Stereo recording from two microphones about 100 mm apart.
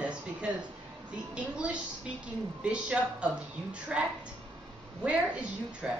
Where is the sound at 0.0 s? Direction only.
10° right (ahead or behind).